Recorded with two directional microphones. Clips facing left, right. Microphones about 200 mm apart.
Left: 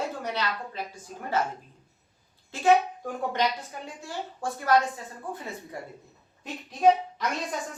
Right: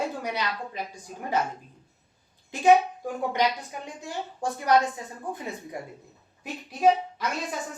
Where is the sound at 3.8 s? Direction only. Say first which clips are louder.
Right 3 dB; 15° right (ahead or behind).